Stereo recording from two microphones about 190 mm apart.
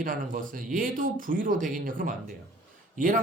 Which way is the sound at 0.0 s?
45° right (ahead or behind).